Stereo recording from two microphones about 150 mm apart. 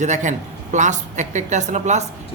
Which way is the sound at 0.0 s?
55° right (ahead or behind).